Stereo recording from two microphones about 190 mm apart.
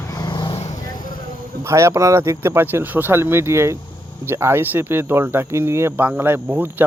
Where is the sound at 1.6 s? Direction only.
15° right (ahead or behind).